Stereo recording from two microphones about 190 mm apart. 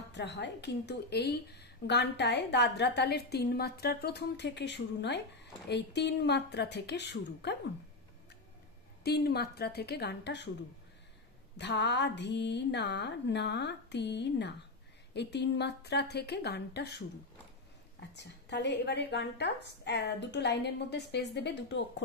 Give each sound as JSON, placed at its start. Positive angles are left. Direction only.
{"t": 0.1, "sound": "a woman's voice", "side_deg": 65}
{"t": 9.0, "sound": "a woman's voice", "side_deg": 55}
{"t": 11.5, "sound": "a woman's voice", "side_deg": 65}
{"t": 18.1, "sound": "a woman's voice", "side_deg": 65}